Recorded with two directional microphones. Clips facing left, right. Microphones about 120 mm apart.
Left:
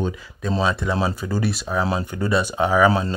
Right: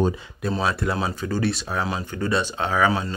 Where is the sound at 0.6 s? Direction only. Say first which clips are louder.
Left 3 dB; centre (ahead or behind).